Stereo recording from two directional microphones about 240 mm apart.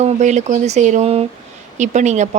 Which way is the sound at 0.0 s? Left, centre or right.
Right.